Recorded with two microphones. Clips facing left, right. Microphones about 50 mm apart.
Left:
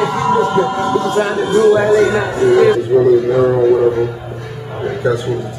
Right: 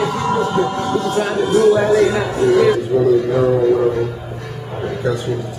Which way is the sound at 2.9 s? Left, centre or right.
Centre.